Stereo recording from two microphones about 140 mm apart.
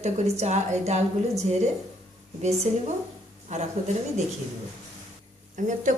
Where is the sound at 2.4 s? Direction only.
50° right (ahead or behind).